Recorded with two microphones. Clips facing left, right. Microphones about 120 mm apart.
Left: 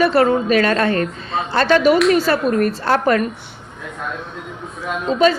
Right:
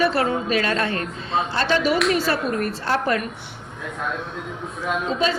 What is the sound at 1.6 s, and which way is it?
A woman's voice, 60° left (ahead or behind).